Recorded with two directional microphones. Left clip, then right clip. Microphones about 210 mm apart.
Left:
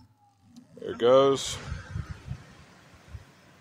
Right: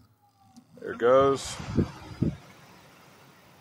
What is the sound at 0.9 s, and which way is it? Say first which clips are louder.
Speech: left 1 dB; 15° left (ahead or behind).